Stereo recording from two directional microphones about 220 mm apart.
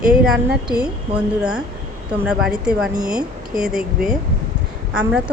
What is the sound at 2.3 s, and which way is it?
A woman's voice, 5° right (ahead or behind).